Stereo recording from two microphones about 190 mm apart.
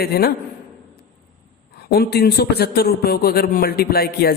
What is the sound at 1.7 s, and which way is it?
A man's voice, 55° left (ahead or behind).